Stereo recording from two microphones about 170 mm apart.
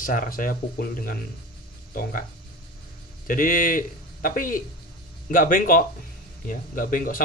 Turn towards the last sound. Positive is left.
turn(degrees=55)  # may be behind; listen again after turning